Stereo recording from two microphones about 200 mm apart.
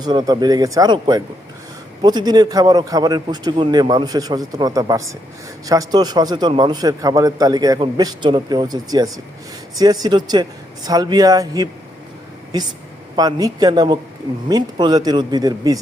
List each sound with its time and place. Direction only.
0.0 s a man's voice: 20° right (ahead or behind)
13.1 s a man's voice: 20° right (ahead or behind)